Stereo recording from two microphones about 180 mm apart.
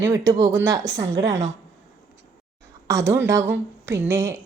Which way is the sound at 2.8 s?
15° right (ahead or behind).